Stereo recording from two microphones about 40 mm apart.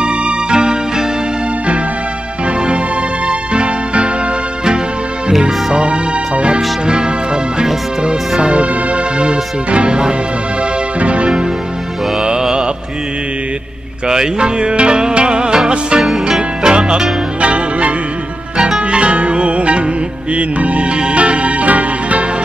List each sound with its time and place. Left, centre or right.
0.0 s music: right
3.3 s music: right
5.9 s music: right
8.1 s music: right
12.2 s music: centre
14.0 s music: centre
16.0 s music: centre
16.3 s music: centre
17.4 s music: right